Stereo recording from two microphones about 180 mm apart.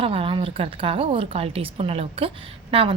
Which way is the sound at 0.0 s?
30° right (ahead or behind).